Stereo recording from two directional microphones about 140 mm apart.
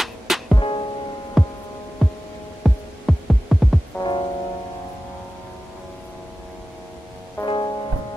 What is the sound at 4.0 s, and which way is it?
Music, 30° left (ahead or behind).